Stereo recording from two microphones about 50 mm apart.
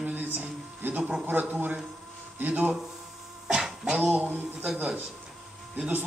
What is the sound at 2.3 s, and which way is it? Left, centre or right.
Speech, right.